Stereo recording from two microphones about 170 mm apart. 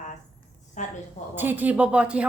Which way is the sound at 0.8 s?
45° left (ahead or behind).